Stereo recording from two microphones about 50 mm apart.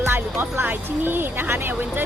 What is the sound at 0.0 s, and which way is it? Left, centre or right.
Speech, right.